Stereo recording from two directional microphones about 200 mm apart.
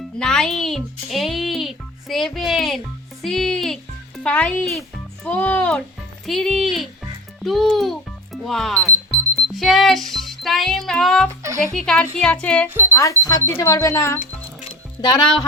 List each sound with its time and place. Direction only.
0.2 s a child's voice: 5° left (ahead or behind)
9.5 s music: centre (ahead or behind)
11.7 s speech: 5° left (ahead or behind)
14.6 s music: 20° left (ahead or behind)